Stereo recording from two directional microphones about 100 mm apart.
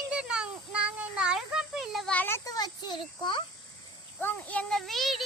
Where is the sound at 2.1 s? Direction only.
15° left (ahead or behind).